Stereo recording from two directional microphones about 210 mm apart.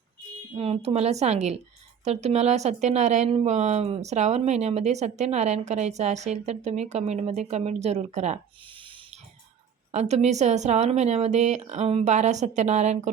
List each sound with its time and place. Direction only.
0.5 s a woman's voice: 30° right (ahead or behind)
9.9 s a woman's voice: 30° right (ahead or behind)